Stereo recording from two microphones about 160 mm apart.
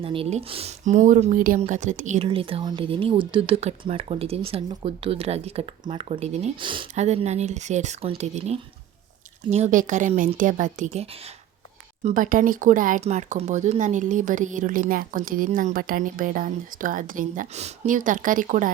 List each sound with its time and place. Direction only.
0.0 s speech: 35° right (ahead or behind)
2.2 s speech: 35° right (ahead or behind)
6.6 s speech: 30° right (ahead or behind)
6.9 s speech: 45° right (ahead or behind)